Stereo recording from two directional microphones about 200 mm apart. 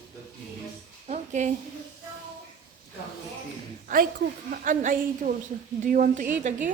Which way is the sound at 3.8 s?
45° right (ahead or behind).